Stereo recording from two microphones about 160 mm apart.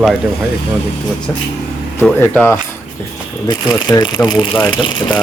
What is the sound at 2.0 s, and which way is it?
Speech, 10° left (ahead or behind).